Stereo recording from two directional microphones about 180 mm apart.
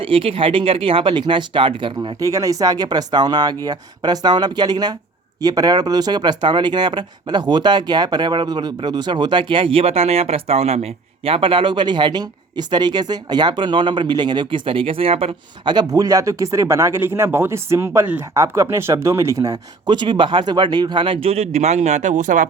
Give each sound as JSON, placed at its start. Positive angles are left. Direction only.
{"t": 0.0, "sound": "speech", "side_deg": -30}